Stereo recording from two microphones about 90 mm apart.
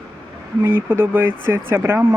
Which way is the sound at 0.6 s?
20° right (ahead or behind).